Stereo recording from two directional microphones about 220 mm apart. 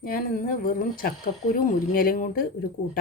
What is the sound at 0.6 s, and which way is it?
Speech, 40° left (ahead or behind).